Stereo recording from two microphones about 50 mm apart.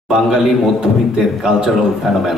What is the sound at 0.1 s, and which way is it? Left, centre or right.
A man's voice, centre.